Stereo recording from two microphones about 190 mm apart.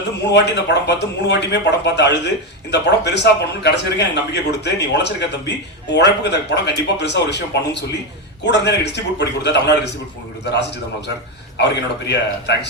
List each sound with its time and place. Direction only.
0.3 s speech: 65° left (ahead or behind)
11.5 s speech: 65° left (ahead or behind)